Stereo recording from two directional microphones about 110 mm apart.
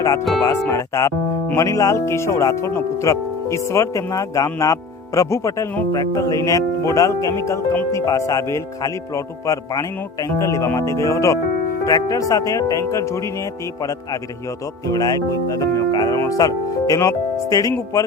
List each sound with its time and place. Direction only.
0.4 s speech: 25° left (ahead or behind)